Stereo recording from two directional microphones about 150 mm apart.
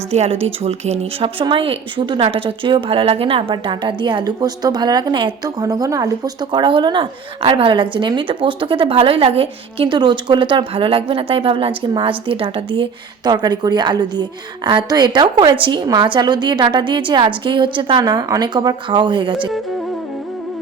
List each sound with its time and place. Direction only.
0.1 s speech: 45° right (ahead or behind)